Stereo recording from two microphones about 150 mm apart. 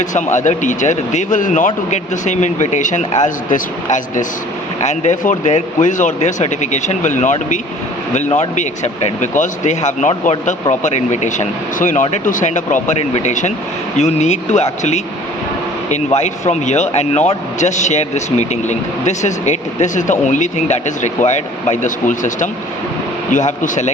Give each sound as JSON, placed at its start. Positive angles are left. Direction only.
{"t": 0.0, "sound": "speech", "side_deg": 55}